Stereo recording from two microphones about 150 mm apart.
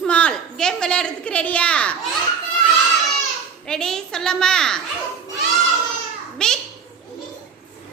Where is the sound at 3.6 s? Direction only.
5° left (ahead or behind).